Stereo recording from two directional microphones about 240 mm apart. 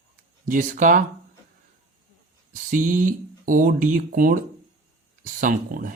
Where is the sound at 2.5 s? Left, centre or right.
Right.